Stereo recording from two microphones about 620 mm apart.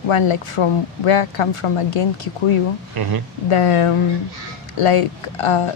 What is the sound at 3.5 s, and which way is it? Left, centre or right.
A woman's voice, left.